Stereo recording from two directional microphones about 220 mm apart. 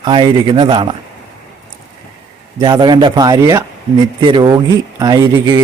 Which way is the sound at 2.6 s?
20° right (ahead or behind).